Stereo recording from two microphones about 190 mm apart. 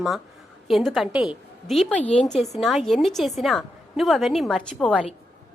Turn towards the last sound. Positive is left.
turn(degrees=5)  # may be behind; listen again after turning